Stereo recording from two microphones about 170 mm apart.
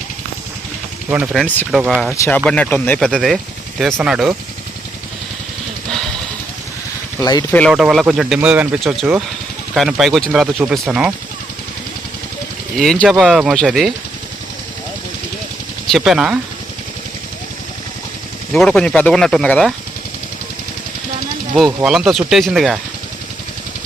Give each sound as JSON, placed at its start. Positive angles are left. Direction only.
{"t": 1.1, "sound": "speech", "side_deg": -5}
{"t": 1.7, "sound": "speech", "side_deg": -10}
{"t": 2.1, "sound": "speech", "side_deg": 15}
{"t": 3.1, "sound": "speech", "side_deg": 0}
{"t": 7.2, "sound": "speech", "side_deg": 20}
{"t": 7.7, "sound": "speech", "side_deg": -5}
{"t": 12.7, "sound": "speech", "side_deg": 0}
{"t": 15.9, "sound": "speech", "side_deg": 0}
{"t": 18.5, "sound": "speech", "side_deg": 5}
{"t": 21.8, "sound": "speech", "side_deg": -5}